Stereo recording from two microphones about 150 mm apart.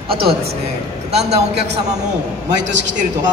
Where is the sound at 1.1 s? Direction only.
90° right.